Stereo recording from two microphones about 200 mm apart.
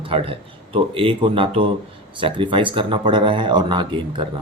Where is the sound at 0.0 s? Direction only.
25° right (ahead or behind).